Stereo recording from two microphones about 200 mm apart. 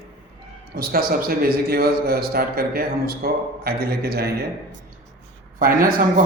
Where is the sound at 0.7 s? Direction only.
45° right (ahead or behind).